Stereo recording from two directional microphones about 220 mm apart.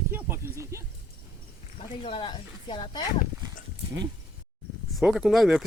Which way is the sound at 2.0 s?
25° left (ahead or behind).